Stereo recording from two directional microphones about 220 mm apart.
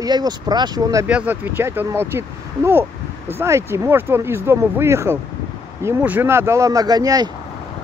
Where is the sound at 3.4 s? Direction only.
10° right (ahead or behind).